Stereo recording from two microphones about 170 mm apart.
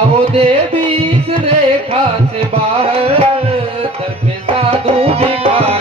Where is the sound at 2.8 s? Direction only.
35° right (ahead or behind).